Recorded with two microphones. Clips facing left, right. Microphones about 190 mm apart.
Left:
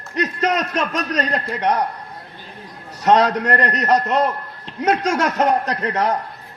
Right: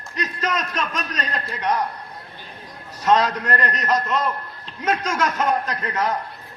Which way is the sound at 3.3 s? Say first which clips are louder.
Left 5 dB; 70° left (ahead or behind).